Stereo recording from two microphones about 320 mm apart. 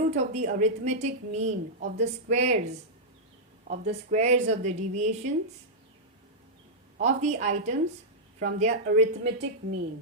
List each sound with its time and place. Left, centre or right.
0.0 s a woman's voice: right
7.0 s a woman's voice: right